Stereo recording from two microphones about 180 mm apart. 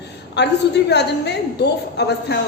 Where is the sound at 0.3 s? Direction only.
70° left (ahead or behind).